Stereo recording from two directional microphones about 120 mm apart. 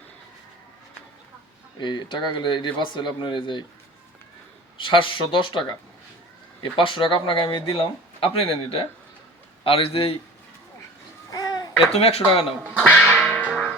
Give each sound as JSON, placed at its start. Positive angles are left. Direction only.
{"t": 1.8, "sound": "speech", "side_deg": 40}
{"t": 4.8, "sound": "speech", "side_deg": 45}
{"t": 11.3, "sound": "babbling", "side_deg": 35}
{"t": 11.9, "sound": "speech", "side_deg": 55}
{"t": 12.6, "sound": "quack", "side_deg": 5}
{"t": 13.1, "sound": "whip", "side_deg": 5}